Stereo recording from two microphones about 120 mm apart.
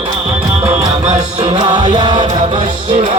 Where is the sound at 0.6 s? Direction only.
55° right (ahead or behind); by 1.9 s 80° right.